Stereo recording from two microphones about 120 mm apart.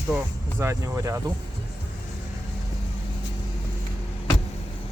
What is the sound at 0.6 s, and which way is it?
Speech, 25° right (ahead or behind).